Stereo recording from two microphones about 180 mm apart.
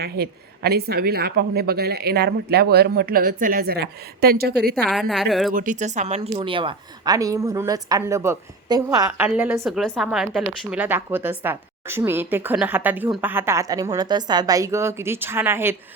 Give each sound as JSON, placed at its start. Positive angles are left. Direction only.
{"t": 0.0, "sound": "speech", "side_deg": -60}
{"t": 4.9, "sound": "a woman's voice", "side_deg": 0}
{"t": 5.5, "sound": "a woman's voice", "side_deg": -45}